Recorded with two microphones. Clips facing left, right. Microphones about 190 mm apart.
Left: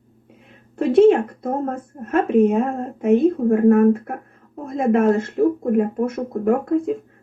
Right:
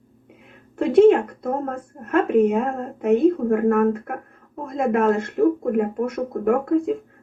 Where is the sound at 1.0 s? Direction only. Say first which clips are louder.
Even; 25° left (ahead or behind).